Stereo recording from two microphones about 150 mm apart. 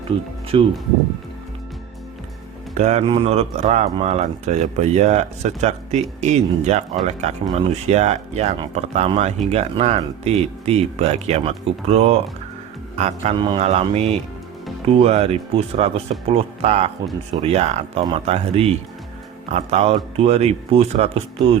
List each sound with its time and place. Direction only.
0.5 s a man's voice: 35° right (ahead or behind)
2.7 s speech: 50° right (ahead or behind)
13.3 s a man's voice: 30° right (ahead or behind)
13.7 s speech: 45° right (ahead or behind)